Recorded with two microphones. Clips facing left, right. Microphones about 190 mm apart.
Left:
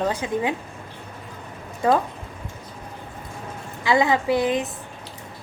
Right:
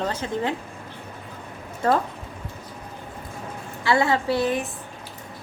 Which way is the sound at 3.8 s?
15° left (ahead or behind).